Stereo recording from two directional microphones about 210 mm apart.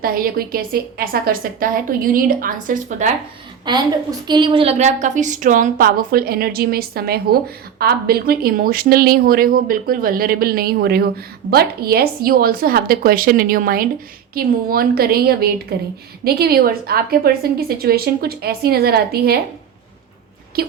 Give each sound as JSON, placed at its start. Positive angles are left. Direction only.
{"t": 0.0, "sound": "speech", "side_deg": -45}
{"t": 3.7, "sound": "a woman's voice", "side_deg": -20}
{"t": 20.6, "sound": "speech", "side_deg": -50}